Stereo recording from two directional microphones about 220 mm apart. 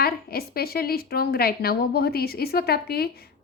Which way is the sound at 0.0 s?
45° left (ahead or behind).